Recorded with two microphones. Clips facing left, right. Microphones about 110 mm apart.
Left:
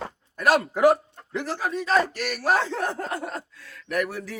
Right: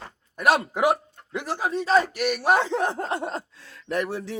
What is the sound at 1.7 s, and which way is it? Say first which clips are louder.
Speech: right 3 dB; 30° right (ahead or behind).